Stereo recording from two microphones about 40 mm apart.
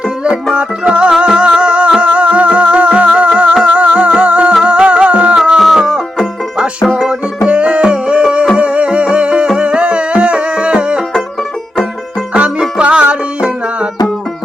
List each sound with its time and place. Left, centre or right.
0.5 s music: right
5.5 s music: centre
7.1 s music: right
12.8 s music: right